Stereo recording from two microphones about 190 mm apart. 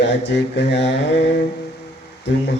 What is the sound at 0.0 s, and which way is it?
Speech, 65° left (ahead or behind).